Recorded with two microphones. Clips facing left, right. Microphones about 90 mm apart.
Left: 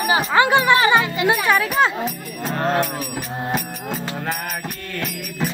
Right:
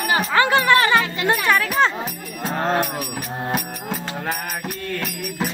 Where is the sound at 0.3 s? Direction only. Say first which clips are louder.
Left 1 dB; 15° left (ahead or behind).